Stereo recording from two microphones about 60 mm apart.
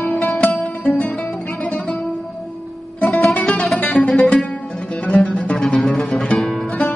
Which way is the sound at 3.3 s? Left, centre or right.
Centre.